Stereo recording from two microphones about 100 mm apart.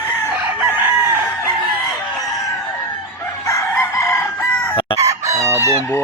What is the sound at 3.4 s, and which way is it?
Chicken, 30° left (ahead or behind).